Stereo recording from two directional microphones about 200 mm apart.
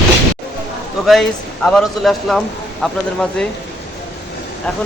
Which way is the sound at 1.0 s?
Centre (ahead or behind).